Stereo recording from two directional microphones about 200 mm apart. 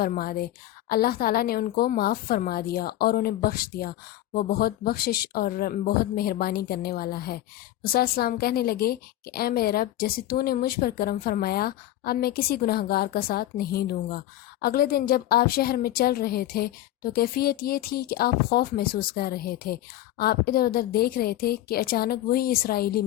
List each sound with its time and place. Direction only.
0.0 s a woman's voice: 50° left (ahead or behind)